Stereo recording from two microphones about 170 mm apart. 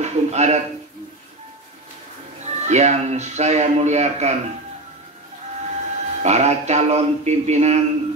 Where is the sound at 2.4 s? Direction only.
40° right (ahead or behind).